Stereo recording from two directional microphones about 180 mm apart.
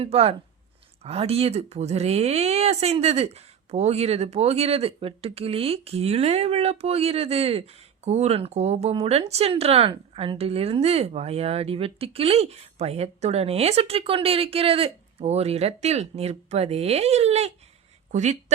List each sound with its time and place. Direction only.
0.0 s speech: 35° right (ahead or behind)